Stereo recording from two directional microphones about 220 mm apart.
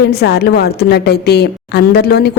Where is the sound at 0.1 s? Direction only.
45° left (ahead or behind).